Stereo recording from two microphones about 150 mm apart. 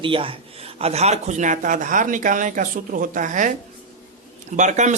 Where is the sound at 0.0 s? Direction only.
35° right (ahead or behind); by 3.5 s 60° right (ahead or behind).